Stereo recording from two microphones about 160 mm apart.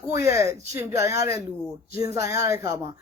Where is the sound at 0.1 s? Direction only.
20° right (ahead or behind).